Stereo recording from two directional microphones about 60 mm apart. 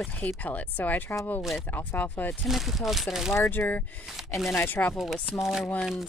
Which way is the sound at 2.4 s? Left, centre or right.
Centre.